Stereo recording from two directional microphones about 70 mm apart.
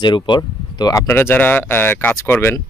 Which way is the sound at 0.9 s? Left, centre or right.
Left.